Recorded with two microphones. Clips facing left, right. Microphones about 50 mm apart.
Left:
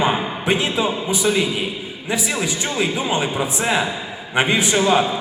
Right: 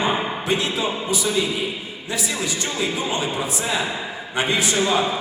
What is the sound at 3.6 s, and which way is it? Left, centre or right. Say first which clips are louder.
A man's voice: left 4 dB; left.